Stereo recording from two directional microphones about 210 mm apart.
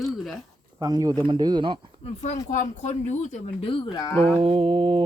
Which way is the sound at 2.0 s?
30° left (ahead or behind).